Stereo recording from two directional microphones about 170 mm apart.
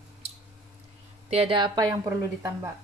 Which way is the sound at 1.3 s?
35° right (ahead or behind).